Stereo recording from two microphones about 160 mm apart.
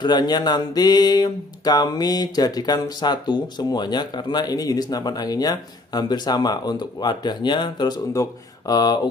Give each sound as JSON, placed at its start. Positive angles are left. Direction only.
{"t": 0.0, "sound": "speech", "side_deg": 25}